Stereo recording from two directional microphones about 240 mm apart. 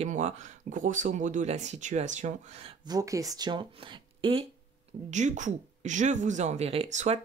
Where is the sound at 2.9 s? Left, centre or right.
Centre.